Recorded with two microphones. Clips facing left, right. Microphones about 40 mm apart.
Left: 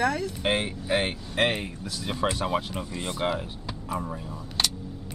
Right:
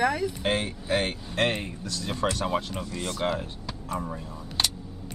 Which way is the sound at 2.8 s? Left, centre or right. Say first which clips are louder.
Even; centre.